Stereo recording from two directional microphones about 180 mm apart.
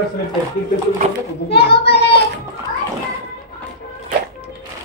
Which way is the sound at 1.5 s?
65° left (ahead or behind).